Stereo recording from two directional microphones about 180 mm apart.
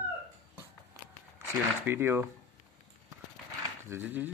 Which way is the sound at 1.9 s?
10° right (ahead or behind).